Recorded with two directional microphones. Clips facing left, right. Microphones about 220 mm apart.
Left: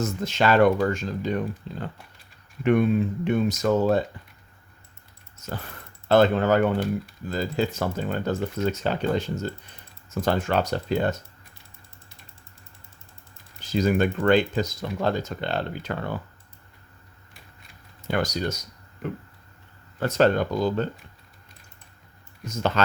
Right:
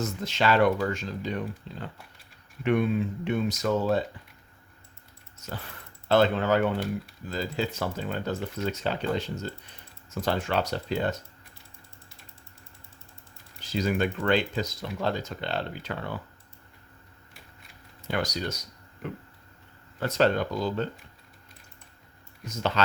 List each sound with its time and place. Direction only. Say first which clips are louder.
0.0 s speech: left 3 dB; 45° left (ahead or behind)
3.2 s speech: left 4 dB; 45° left (ahead or behind)
6.1 s speech: left 4 dB; 50° left (ahead or behind)
13.6 s speech: left 5 dB; 45° left (ahead or behind)
18.1 s speech: left 4 dB; 50° left (ahead or behind)
20.0 s speech: left 3 dB; 45° left (ahead or behind)
22.4 s speech: left 3 dB; 45° left (ahead or behind)